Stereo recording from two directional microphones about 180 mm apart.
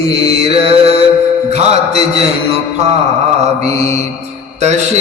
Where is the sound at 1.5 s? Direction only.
35° right (ahead or behind).